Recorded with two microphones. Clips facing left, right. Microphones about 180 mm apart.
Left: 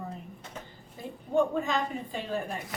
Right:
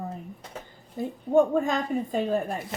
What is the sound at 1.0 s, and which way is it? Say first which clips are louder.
Speech: right 6 dB; 50° right (ahead or behind).